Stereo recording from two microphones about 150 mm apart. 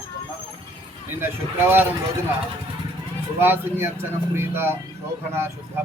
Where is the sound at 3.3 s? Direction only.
15° right (ahead or behind).